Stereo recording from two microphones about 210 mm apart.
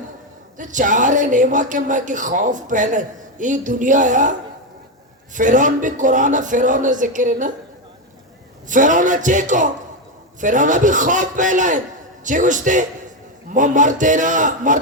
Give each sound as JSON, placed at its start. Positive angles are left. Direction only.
{"t": 0.6, "sound": "speech", "side_deg": -35}
{"t": 8.7, "sound": "speech", "side_deg": -35}